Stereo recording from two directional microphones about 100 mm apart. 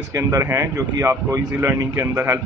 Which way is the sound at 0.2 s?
25° right (ahead or behind).